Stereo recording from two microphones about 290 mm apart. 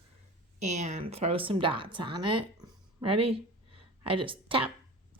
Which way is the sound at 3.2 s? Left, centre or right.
Centre.